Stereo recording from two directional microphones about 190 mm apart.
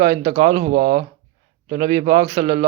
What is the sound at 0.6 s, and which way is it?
Speech, 50° right (ahead or behind).